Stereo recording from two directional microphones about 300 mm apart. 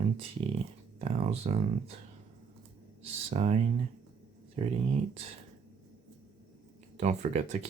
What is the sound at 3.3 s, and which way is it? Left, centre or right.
Speech, right.